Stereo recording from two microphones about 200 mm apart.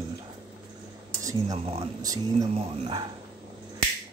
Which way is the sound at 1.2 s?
15° right (ahead or behind).